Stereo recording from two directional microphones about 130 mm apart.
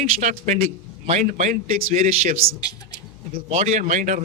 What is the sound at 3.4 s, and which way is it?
Speech, 60° right (ahead or behind).